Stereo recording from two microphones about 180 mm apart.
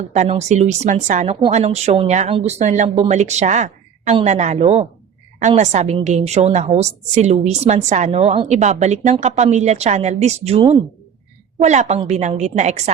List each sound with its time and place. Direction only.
0.1 s a woman's voice: 40° right (ahead or behind)